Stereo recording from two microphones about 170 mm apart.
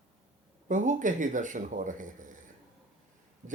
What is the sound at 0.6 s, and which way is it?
Speech, 45° right (ahead or behind).